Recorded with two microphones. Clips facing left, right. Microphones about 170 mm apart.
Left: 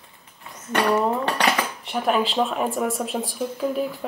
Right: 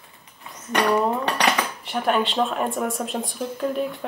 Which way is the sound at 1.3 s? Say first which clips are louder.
Even; centre (ahead or behind).